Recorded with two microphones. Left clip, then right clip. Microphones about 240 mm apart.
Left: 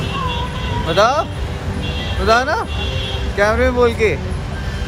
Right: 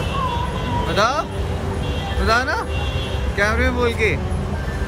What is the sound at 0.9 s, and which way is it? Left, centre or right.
Speech, centre.